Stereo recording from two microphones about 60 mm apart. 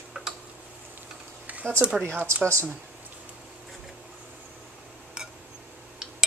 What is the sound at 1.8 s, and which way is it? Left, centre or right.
Speech, right.